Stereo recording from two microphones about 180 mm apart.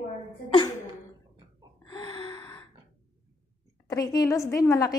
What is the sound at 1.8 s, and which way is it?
Gasp, 25° left (ahead or behind).